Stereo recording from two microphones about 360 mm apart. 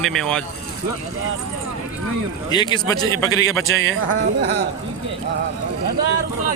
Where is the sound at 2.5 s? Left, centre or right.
Centre.